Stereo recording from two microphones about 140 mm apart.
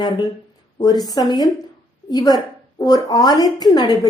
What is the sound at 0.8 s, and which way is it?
A woman's voice, 30° left (ahead or behind).